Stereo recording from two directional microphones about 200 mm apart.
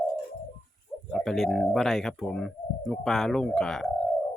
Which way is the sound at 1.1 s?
5° left (ahead or behind).